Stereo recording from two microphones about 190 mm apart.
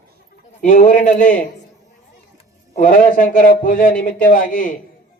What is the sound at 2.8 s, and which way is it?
A man's voice, 45° left (ahead or behind).